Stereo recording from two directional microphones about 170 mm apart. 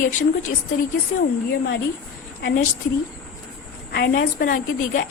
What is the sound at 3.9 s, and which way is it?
A woman's voice, 70° left (ahead or behind).